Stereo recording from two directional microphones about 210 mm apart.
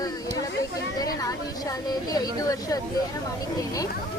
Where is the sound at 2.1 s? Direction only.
15° left (ahead or behind).